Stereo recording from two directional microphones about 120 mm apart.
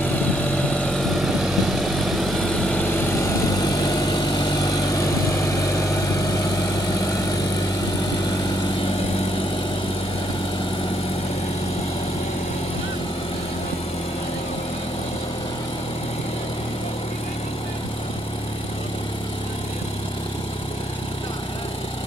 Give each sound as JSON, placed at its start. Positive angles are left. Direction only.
{"t": 0.0, "sound": "vehicle", "side_deg": 15}
{"t": 3.5, "sound": "vehicle", "side_deg": 35}